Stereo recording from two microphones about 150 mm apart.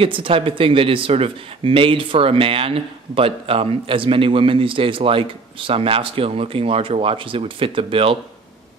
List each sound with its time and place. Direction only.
0.0 s speech: 35° right (ahead or behind)